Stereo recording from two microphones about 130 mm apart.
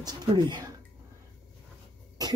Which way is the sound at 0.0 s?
30° right (ahead or behind).